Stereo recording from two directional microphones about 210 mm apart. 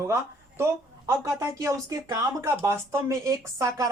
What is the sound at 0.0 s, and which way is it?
Speech, 10° right (ahead or behind).